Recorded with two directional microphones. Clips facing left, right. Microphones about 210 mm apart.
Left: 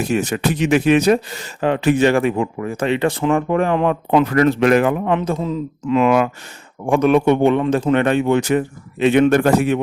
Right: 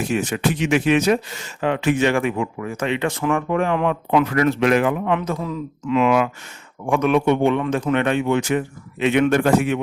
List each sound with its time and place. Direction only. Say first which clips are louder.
0.0 s speech: left 2 dB; 40° left (ahead or behind)
5.9 s speech: left 2 dB; 45° left (ahead or behind)